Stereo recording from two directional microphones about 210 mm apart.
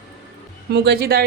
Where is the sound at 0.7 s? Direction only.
50° right (ahead or behind).